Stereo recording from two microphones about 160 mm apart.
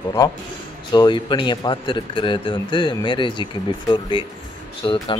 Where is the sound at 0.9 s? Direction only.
25° left (ahead or behind).